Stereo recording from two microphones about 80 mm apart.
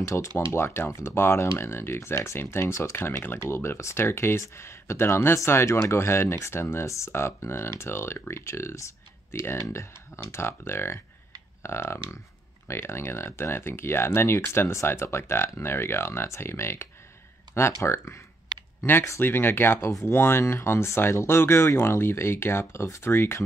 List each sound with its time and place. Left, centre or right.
0.0 s speech: left